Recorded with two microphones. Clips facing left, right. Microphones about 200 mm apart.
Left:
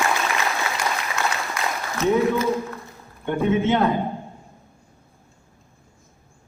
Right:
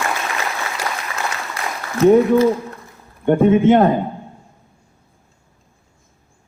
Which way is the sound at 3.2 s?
50° right (ahead or behind).